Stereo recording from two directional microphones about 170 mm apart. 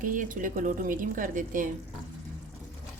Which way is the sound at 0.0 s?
50° right (ahead or behind).